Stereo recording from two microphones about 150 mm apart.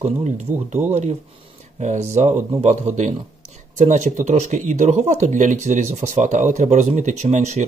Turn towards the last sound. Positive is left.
turn(degrees=-50)  # may be behind; listen again after turning